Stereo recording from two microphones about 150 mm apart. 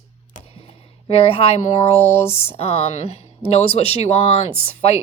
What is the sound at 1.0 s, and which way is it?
A woman's voice, 40° left (ahead or behind).